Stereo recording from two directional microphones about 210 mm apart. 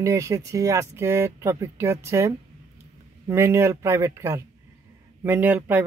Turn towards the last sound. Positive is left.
turn(degrees=-10)  # may be behind; listen again after turning